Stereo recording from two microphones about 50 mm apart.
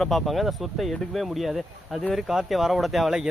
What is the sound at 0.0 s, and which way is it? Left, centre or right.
Speech, centre.